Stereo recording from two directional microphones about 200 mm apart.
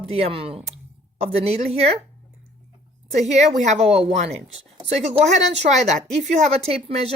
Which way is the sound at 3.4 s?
35° right (ahead or behind).